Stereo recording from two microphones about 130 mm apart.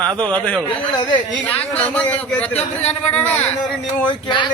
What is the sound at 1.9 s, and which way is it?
Speech, 10° left (ahead or behind).